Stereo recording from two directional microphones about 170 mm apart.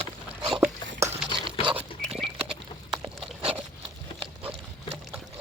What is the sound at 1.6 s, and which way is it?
Pig, 30° right (ahead or behind).